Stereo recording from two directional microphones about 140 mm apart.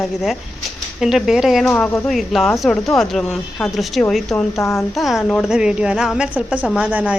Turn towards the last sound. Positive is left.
turn(degrees=-10)  # may be behind; listen again after turning